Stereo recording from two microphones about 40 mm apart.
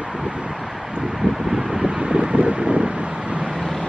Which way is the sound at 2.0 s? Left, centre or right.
Right.